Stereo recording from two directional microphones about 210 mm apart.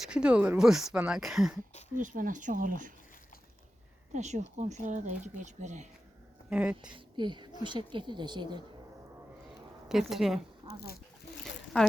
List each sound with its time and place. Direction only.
0.1 s speech: 5° right (ahead or behind)
2.0 s speech: 40° right (ahead or behind)
4.1 s speech: 35° right (ahead or behind)
6.5 s speech: 5° right (ahead or behind)
6.9 s speech: 20° right (ahead or behind)
9.9 s speech: centre (ahead or behind)
10.7 s speech: 45° left (ahead or behind)